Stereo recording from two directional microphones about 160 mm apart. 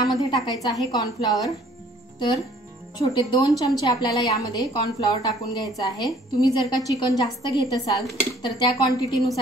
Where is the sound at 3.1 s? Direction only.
30° left (ahead or behind).